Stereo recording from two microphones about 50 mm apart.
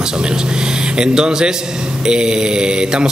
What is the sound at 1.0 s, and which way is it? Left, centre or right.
Speech, centre.